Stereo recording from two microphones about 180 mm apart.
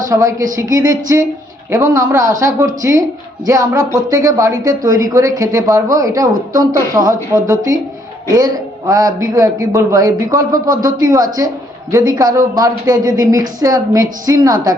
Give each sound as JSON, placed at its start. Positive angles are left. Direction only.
{"t": 0.1, "sound": "a man's voice", "side_deg": -15}